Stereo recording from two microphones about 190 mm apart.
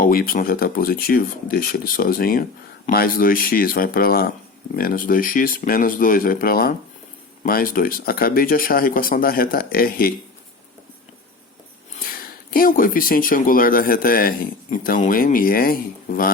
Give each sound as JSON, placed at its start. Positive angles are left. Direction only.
{"t": 0.0, "sound": "speech", "side_deg": 50}
{"t": 11.9, "sound": "speech", "side_deg": 50}